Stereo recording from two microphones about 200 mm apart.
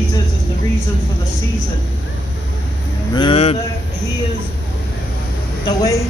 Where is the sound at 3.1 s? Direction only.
25° left (ahead or behind).